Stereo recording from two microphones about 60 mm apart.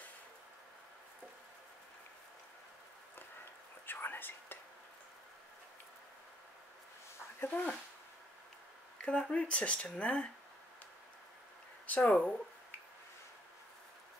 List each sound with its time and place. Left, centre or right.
3.8 s whispering: left
7.3 s speech: left
8.9 s speech: centre
11.8 s speech: left